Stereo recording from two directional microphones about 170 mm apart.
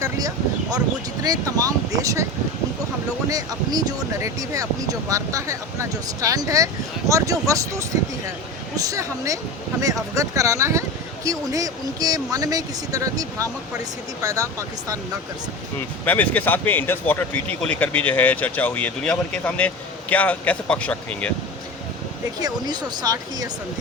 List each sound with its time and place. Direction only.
0.0 s a sound: 20° right (ahead or behind)
1.2 s speech: 20° right (ahead or behind)
3.2 s speech: 20° right (ahead or behind)
16.0 s speech: 10° left (ahead or behind)
22.4 s speech: 25° right (ahead or behind)